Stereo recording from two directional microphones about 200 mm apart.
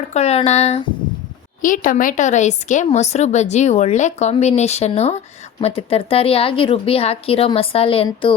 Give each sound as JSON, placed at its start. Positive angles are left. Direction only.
{"t": 0.1, "sound": "a woman's voice", "side_deg": 30}